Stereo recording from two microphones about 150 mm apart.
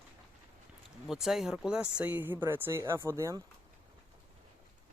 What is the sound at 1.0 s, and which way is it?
Speech, centre (ahead or behind).